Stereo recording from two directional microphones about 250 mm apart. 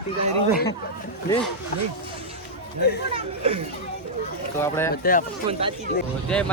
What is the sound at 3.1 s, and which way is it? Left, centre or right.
Speech, right.